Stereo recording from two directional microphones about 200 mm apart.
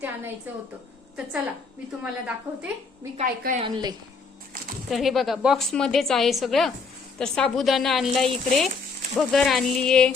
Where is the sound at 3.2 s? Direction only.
45° right (ahead or behind).